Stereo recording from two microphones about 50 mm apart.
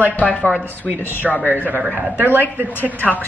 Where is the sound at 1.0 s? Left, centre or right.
Left.